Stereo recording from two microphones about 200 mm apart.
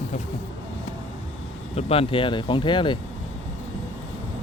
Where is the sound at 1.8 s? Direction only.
30° left (ahead or behind).